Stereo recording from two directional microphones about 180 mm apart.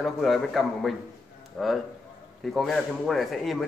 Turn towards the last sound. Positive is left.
turn(degrees=0)  # may be behind; listen again after turning